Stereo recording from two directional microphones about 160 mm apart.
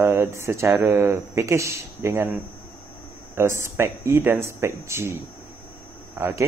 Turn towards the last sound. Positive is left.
turn(degrees=-15)  # may be behind; listen again after turning